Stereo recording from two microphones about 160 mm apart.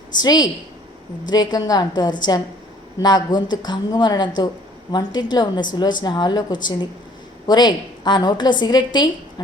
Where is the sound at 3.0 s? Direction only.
25° left (ahead or behind).